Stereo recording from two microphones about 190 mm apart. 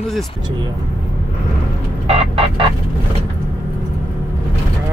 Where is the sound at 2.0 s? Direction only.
30° right (ahead or behind).